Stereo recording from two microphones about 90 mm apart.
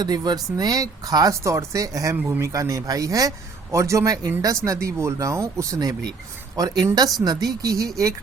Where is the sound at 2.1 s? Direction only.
25° right (ahead or behind).